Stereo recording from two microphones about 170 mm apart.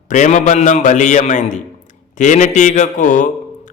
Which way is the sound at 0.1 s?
45° left (ahead or behind).